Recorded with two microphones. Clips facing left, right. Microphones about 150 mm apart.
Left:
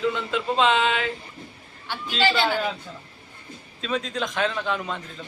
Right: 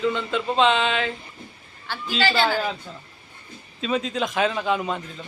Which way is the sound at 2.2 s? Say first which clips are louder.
Right 1 dB; 15° left (ahead or behind).